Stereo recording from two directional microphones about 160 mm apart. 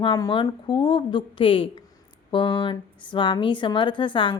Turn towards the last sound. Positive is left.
turn(degrees=30)  # may be behind; listen again after turning